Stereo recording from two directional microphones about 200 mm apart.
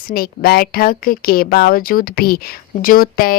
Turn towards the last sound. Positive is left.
turn(degrees=45)  # may be behind; listen again after turning